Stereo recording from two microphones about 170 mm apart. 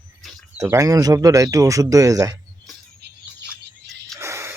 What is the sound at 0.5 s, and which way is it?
A man's voice, 20° right (ahead or behind).